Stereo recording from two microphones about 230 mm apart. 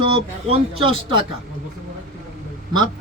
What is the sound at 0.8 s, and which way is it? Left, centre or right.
Speech, right.